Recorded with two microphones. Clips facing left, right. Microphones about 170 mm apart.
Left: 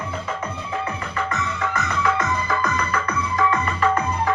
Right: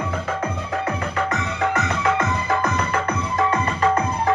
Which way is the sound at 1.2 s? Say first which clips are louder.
Even; 60° right (ahead or behind).